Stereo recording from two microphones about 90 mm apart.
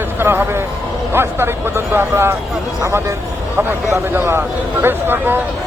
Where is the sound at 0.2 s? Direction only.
25° right (ahead or behind).